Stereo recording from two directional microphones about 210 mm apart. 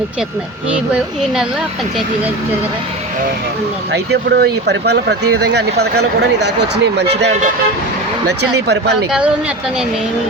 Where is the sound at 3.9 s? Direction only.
55° right (ahead or behind).